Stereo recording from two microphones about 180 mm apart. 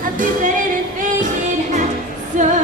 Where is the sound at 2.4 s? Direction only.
45° right (ahead or behind).